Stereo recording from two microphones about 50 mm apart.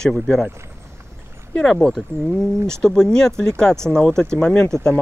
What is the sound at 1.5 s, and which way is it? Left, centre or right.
Speech, centre.